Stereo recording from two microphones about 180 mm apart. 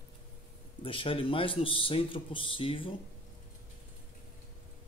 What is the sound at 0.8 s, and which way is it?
Speech, 30° left (ahead or behind).